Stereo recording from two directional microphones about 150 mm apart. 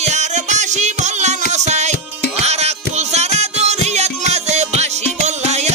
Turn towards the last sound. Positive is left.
turn(degrees=-50)  # may be behind; listen again after turning